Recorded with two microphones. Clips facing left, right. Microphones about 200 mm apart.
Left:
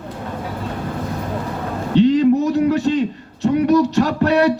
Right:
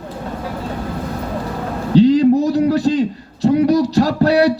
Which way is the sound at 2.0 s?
35° right (ahead or behind).